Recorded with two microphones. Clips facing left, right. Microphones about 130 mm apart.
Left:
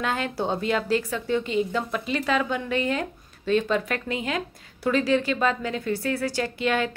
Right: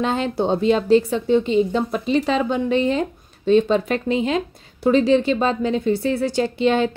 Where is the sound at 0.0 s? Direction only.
25° right (ahead or behind).